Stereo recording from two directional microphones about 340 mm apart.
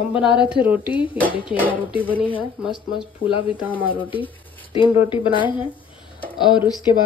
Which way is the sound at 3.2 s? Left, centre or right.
Centre.